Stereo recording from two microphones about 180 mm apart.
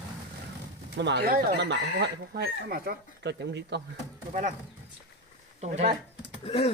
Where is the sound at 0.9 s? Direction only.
70° right (ahead or behind).